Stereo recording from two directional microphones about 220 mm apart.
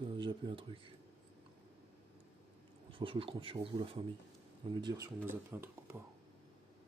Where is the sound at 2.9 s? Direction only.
25° right (ahead or behind).